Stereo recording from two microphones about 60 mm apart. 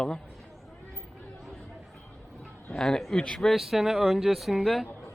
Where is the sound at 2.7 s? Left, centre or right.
Centre.